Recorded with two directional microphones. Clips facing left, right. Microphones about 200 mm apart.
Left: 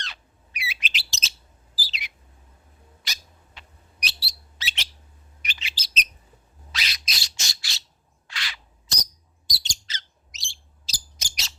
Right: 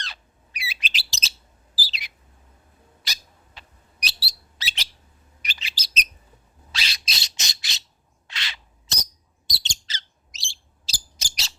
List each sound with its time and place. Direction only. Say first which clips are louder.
0.0 s bird: right 1 dB; 35° right (ahead or behind)
3.0 s cat: right 1 dB; 35° right (ahead or behind)
4.0 s bird: right 1 dB; 35° right (ahead or behind)
6.7 s squawk: right 1 dB; 30° right (ahead or behind)
8.3 s a sound: even; 25° right (ahead or behind)
9.5 s bird: right 1 dB; 25° right (ahead or behind)